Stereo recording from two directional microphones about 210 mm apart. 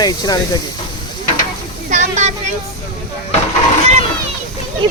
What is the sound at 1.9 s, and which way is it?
Speech, 35° right (ahead or behind).